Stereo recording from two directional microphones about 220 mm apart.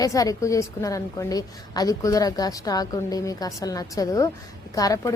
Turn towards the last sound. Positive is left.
turn(degrees=15)  # may be behind; listen again after turning